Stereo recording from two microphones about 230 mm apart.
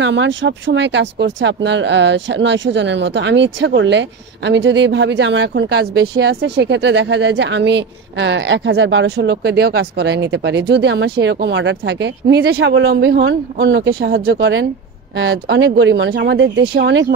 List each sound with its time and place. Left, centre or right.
0.0 s speech: right